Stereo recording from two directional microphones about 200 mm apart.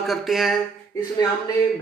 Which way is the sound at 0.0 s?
Centre (ahead or behind).